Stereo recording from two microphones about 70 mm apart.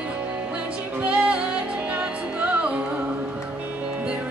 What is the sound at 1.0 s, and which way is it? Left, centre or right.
Music, centre.